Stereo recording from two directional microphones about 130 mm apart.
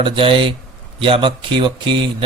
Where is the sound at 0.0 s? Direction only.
40° right (ahead or behind).